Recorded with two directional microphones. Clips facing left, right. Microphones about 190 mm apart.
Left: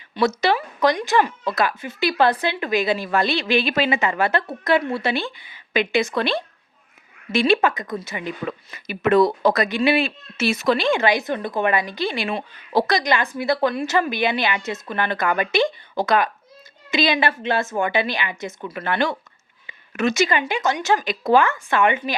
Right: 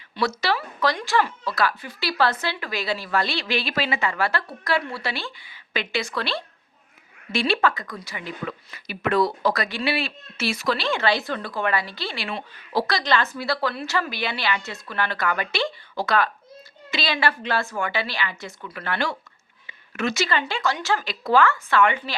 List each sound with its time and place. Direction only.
0.1 s a woman's voice: 20° left (ahead or behind)